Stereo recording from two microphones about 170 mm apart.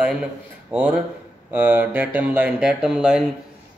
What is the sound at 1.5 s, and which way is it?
Speech, 10° right (ahead or behind).